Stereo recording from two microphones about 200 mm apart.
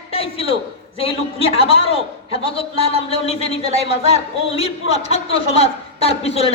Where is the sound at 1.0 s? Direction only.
30° left (ahead or behind).